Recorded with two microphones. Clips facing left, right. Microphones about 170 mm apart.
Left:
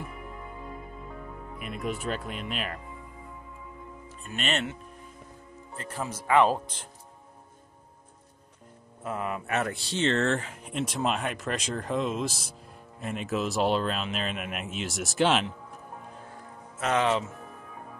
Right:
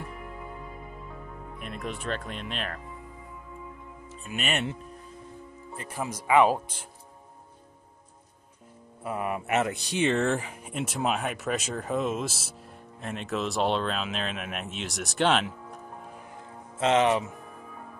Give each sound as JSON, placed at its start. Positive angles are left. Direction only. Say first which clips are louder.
{"t": 1.6, "sound": "speech", "louder": "left 3 dB", "side_deg": 0}
{"t": 4.3, "sound": "speech", "louder": "even", "side_deg": -10}
{"t": 5.8, "sound": "speech", "louder": "right 1 dB", "side_deg": -10}
{"t": 9.0, "sound": "speech", "louder": "right 1 dB", "side_deg": -15}
{"t": 16.8, "sound": "speech", "louder": "right 3 dB", "side_deg": -20}